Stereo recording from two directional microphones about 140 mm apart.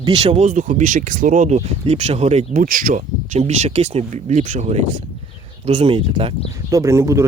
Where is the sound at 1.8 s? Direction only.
50° right (ahead or behind); by 3.0 s 80° right.